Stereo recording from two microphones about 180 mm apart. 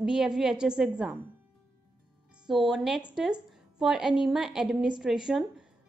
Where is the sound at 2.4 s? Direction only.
Centre (ahead or behind).